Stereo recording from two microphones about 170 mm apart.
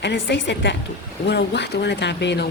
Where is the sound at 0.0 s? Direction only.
90° left.